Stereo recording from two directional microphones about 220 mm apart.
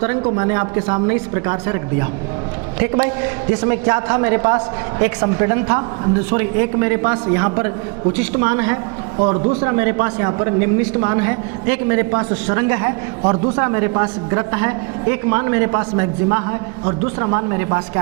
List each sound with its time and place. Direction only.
0.3 s a man's voice: 20° right (ahead or behind)
9.1 s a man's voice: 30° right (ahead or behind)
9.6 s a man's voice: 15° right (ahead or behind)